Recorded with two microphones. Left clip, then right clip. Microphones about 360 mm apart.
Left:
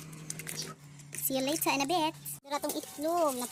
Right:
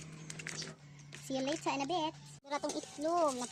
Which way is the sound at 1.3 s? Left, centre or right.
Right.